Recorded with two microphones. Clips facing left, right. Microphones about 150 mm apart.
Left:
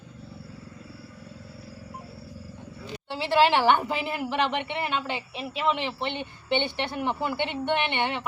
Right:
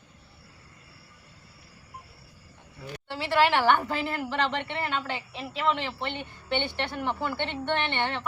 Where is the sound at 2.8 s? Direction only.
20° left (ahead or behind).